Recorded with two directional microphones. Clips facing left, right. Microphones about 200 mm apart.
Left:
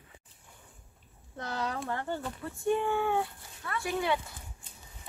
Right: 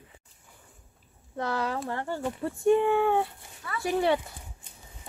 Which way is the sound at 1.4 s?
75° right (ahead or behind).